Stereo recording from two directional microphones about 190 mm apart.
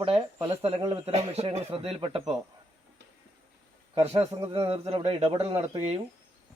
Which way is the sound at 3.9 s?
30° right (ahead or behind).